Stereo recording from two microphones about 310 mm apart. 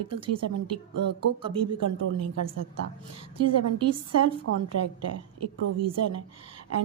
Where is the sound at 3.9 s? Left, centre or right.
Right.